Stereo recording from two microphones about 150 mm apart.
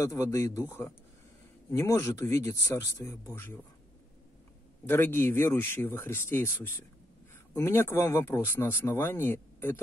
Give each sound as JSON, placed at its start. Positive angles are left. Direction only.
{"t": 0.0, "sound": "speech", "side_deg": 20}
{"t": 4.8, "sound": "speech", "side_deg": 15}